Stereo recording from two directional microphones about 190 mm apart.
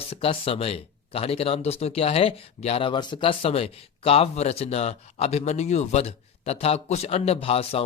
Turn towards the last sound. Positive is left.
turn(degrees=30)  # may be behind; listen again after turning